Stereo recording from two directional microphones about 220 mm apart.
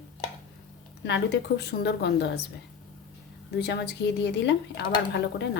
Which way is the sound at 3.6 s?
50° left (ahead or behind).